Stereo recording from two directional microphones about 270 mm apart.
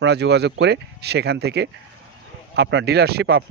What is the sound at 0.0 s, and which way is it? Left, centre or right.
Speech, right.